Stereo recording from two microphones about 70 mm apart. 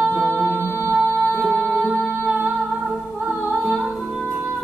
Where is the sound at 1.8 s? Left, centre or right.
Centre.